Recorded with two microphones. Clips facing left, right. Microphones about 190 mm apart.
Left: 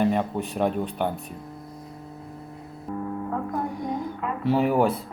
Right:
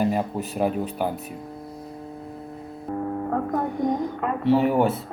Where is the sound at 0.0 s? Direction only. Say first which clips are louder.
Even; 5° right (ahead or behind).